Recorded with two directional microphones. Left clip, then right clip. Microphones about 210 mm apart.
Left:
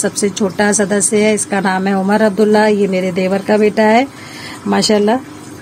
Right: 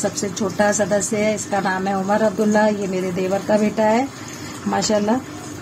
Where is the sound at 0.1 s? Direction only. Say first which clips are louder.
Left 7 dB; 50° left (ahead or behind).